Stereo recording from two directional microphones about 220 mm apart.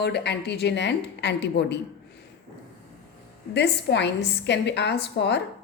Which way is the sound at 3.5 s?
50° left (ahead or behind).